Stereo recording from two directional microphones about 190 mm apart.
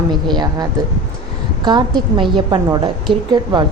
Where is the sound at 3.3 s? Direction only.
25° right (ahead or behind).